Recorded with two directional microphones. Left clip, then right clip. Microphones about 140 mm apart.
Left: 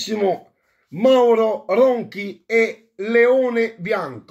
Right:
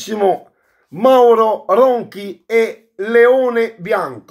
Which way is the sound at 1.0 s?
20° left (ahead or behind).